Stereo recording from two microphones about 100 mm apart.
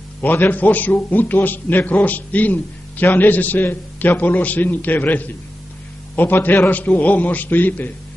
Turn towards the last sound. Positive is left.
turn(degrees=20)  # may be behind; listen again after turning